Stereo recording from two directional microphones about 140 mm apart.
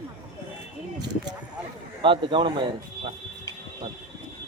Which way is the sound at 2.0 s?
35° right (ahead or behind).